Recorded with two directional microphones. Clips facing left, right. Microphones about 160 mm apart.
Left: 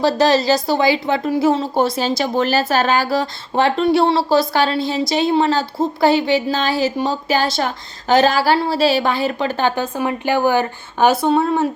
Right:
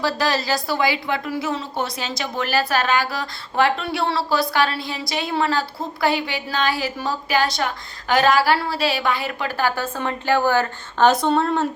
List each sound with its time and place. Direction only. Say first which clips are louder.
0.0 s a woman's voice: left 7 dB; 25° left (ahead or behind); by 11.7 s 10° left (ahead or behind)